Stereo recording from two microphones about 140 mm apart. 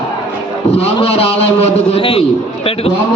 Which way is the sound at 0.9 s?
45° left (ahead or behind).